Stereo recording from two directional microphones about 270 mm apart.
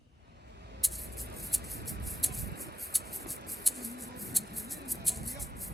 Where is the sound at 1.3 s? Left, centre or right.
Right.